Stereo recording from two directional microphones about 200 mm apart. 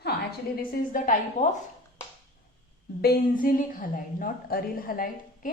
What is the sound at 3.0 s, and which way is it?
A woman's voice, 45° left (ahead or behind).